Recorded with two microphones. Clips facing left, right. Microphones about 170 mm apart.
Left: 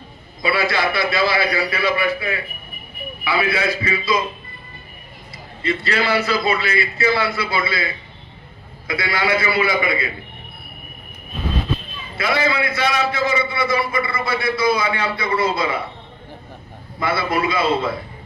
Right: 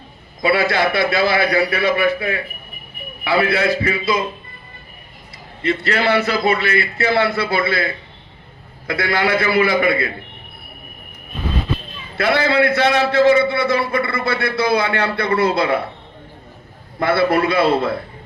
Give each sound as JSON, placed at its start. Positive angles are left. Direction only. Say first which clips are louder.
{"t": 0.4, "sound": "a man's voice", "louder": "right 3 dB", "side_deg": -55}
{"t": 5.6, "sound": "a man's voice", "louder": "right 3 dB", "side_deg": -55}
{"t": 12.2, "sound": "a man's voice", "louder": "right 5 dB", "side_deg": -60}
{"t": 17.0, "sound": "a man's voice", "louder": "right 5 dB", "side_deg": -60}